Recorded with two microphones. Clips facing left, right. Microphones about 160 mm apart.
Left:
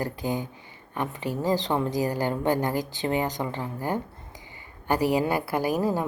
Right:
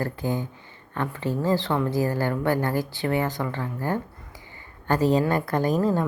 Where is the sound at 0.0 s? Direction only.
15° left (ahead or behind).